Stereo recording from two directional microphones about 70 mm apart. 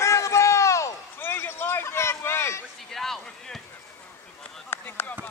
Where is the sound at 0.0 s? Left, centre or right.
Left.